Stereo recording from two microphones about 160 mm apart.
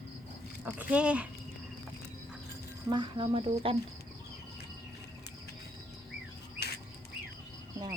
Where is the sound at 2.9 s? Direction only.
30° right (ahead or behind).